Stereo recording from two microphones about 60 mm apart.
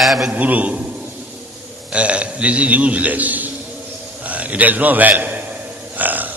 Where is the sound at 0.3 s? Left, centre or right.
Right.